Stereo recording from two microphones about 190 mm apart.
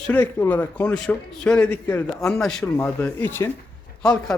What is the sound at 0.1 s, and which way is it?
Speech, 10° left (ahead or behind).